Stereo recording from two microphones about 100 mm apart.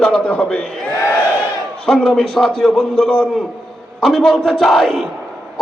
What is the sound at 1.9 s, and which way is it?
Crowd, 5° left (ahead or behind).